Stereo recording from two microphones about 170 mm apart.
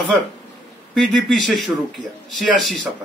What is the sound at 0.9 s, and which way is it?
A man's voice, centre (ahead or behind).